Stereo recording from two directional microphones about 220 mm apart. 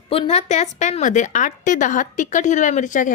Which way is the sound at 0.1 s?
25° left (ahead or behind).